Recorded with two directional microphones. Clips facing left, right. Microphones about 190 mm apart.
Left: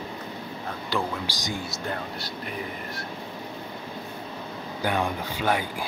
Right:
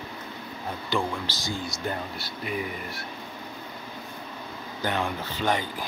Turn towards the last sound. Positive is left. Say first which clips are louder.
# left 1 dB
turn(degrees=10)  # may be behind; listen again after turning